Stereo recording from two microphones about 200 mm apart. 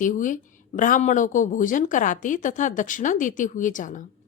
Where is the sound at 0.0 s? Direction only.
40° left (ahead or behind).